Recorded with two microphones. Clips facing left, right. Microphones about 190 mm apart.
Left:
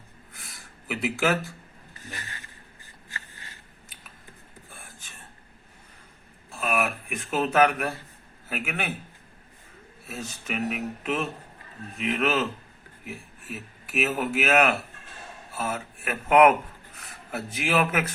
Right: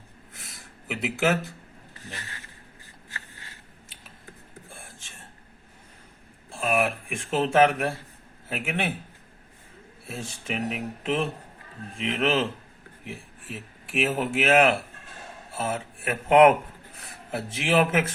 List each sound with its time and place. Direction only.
0.9 s speech: 20° right (ahead or behind)
4.7 s a sound: 25° right (ahead or behind)
6.5 s speech: 25° right (ahead or behind)
10.1 s speech: 30° right (ahead or behind)